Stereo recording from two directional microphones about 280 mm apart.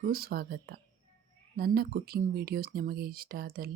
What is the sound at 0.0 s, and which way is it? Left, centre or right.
Speech, right.